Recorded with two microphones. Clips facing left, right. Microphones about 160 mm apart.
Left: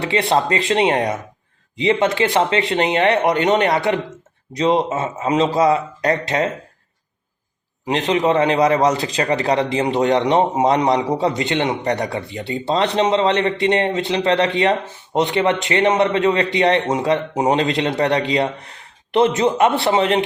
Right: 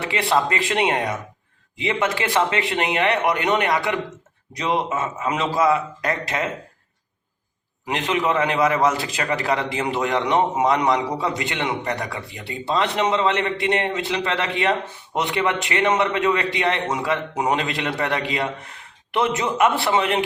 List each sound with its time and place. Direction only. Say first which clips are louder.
0.1 s a man's voice: left 3 dB; 30° left (ahead or behind)
7.9 s a man's voice: left 5 dB; 30° left (ahead or behind)